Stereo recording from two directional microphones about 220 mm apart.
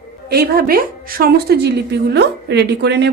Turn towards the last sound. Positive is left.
turn(degrees=-50)  # may be behind; listen again after turning